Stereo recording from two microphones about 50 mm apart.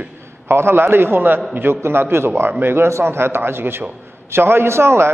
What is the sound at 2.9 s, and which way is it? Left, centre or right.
A man's voice, right.